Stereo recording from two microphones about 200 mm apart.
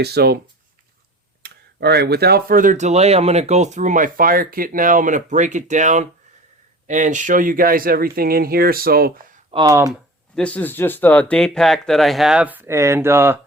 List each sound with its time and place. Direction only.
0.0 s speech: 55° right (ahead or behind)
1.4 s speech: 55° right (ahead or behind)
9.5 s speech: 20° right (ahead or behind)
10.3 s speech: 5° left (ahead or behind); by 13.4 s 10° right (ahead or behind)